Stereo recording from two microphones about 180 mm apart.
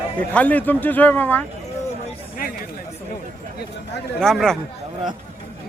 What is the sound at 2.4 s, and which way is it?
Chatter, 50° left (ahead or behind).